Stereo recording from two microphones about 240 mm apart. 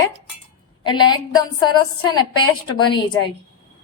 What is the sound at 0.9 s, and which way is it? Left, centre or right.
A woman's voice, centre.